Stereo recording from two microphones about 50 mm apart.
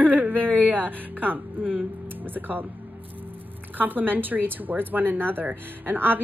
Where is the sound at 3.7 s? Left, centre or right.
Right.